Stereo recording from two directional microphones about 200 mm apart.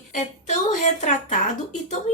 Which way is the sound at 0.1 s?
40° left (ahead or behind).